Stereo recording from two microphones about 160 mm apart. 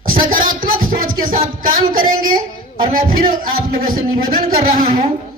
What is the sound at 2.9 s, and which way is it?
Speech, 60° right (ahead or behind).